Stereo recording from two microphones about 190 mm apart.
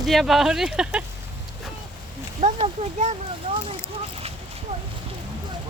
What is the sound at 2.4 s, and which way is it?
Speech, 30° right (ahead or behind).